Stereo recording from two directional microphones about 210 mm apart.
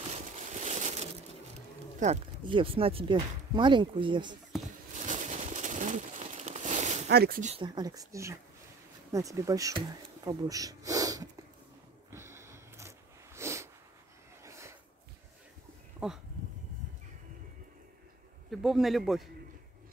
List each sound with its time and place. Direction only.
0.1 s a sound: 35° right (ahead or behind)
2.0 s speech: 30° right (ahead or behind)
4.9 s bird: 35° right (ahead or behind)
7.1 s speech: 50° right (ahead or behind)
7.5 s speech: 20° right (ahead or behind)
12.1 s a sound: 10° right (ahead or behind)
16.0 s speech: 5° right (ahead or behind)
18.5 s a man's voice: centre (ahead or behind)